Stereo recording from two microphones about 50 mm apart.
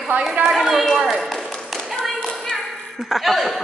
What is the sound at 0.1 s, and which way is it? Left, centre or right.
Speech, right.